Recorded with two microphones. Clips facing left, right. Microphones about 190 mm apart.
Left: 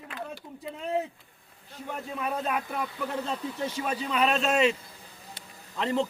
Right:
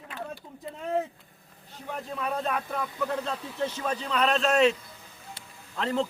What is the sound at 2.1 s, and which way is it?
Speech, 10° left (ahead or behind).